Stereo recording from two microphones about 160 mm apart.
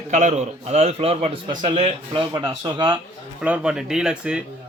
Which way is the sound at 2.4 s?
30° right (ahead or behind).